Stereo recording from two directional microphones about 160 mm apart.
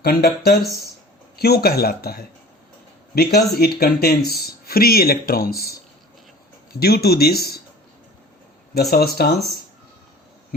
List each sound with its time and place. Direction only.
0.0 s speech: 80° left
6.7 s speech: 75° left (ahead or behind)
8.7 s speech: 80° left